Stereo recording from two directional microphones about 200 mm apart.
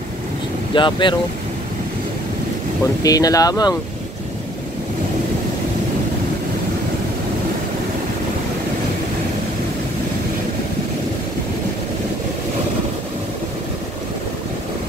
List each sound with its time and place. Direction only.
0.7 s speech: 25° left (ahead or behind)
3.0 s speech: 20° left (ahead or behind)